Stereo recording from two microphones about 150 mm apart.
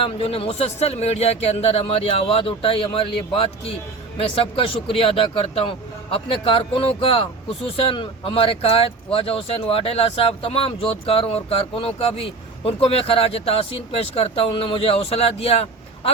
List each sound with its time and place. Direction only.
0.0 s speech: 40° left (ahead or behind)